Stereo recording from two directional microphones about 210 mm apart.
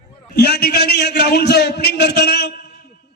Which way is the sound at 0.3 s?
50° left (ahead or behind).